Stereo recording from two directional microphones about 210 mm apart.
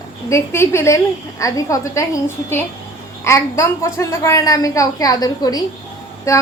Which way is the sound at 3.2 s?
15° left (ahead or behind).